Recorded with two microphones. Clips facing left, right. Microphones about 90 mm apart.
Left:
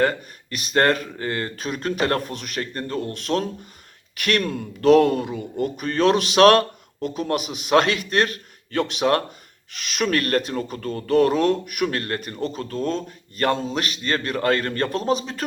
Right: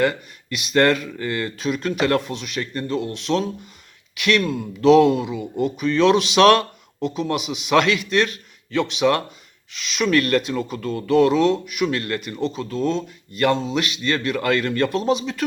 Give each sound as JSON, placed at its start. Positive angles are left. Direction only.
{"t": 0.0, "sound": "speech", "side_deg": 40}